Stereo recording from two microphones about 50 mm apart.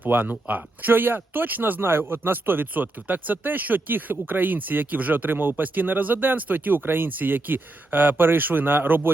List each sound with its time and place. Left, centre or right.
0.0 s speech: right
1.8 s speech: right